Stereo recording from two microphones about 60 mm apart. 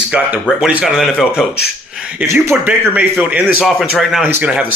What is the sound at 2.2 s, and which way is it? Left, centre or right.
Speech, right.